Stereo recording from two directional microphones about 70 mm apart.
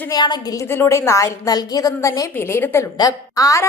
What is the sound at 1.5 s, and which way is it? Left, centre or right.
Speech, left.